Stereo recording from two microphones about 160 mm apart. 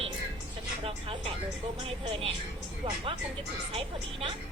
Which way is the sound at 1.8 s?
35° right (ahead or behind).